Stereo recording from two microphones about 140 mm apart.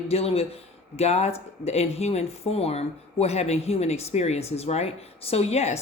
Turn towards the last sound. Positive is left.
turn(degrees=50)  # may be behind; listen again after turning